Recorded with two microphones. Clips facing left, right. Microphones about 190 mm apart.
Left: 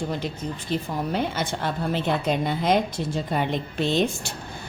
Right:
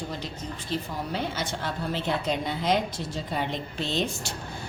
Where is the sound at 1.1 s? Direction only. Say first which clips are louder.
Left 3 dB; 55° left (ahead or behind).